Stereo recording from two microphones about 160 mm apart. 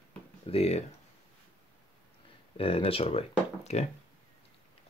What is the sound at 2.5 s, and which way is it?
Speech, 35° left (ahead or behind).